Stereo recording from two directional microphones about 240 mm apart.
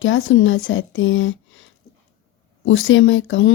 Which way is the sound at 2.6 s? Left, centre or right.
Left.